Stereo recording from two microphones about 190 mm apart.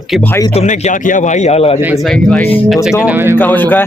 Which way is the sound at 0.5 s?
35° left (ahead or behind).